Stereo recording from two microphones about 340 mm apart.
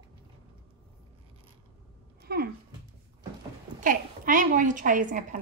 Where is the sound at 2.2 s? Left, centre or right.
Right.